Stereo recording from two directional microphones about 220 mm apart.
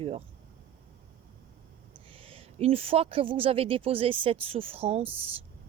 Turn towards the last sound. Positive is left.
turn(degrees=-25)  # may be behind; listen again after turning